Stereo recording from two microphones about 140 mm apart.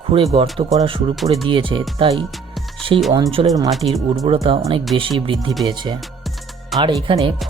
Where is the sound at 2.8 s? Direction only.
40° right (ahead or behind).